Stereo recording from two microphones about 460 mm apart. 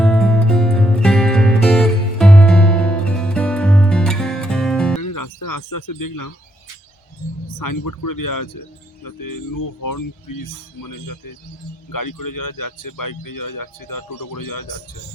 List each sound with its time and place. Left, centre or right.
0.0 s music: centre
5.0 s a sound: left
7.6 s speech: left